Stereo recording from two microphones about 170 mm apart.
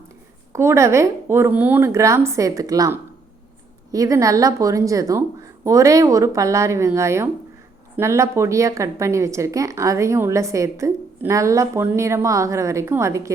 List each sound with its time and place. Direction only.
0.5 s a woman's voice: 15° right (ahead or behind)